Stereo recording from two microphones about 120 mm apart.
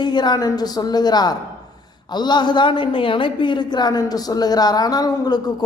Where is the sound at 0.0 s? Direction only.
40° left (ahead or behind).